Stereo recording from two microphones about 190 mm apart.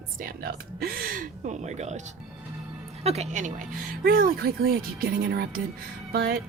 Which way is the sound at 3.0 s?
35° right (ahead or behind).